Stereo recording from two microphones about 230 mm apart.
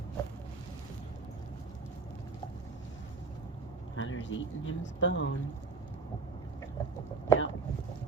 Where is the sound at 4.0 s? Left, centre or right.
Left.